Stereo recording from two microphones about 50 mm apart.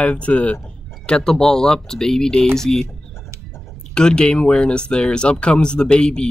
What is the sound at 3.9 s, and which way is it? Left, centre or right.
Speech, centre.